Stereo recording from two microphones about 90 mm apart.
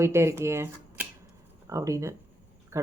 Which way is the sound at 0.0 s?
30° right (ahead or behind).